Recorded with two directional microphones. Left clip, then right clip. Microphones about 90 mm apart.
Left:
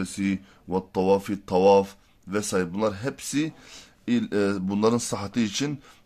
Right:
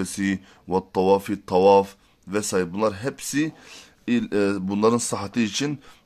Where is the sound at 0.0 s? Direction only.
65° right (ahead or behind).